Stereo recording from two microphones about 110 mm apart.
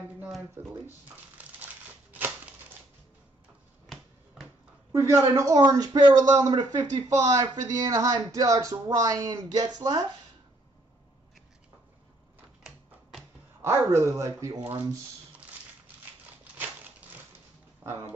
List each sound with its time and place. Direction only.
0.6 s speech: 20° right (ahead or behind)
2.1 s a sound: 15° right (ahead or behind)
4.9 s speech: 25° right (ahead or behind)
13.6 s speech: 25° right (ahead or behind)
17.8 s speech: 20° right (ahead or behind)